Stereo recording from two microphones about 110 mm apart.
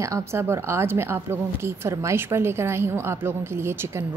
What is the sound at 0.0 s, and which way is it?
A woman's voice, 25° right (ahead or behind).